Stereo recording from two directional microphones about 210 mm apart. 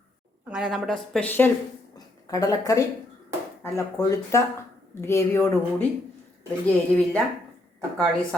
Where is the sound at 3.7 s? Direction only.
15° left (ahead or behind).